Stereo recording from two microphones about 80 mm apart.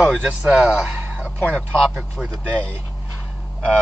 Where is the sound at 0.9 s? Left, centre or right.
Centre.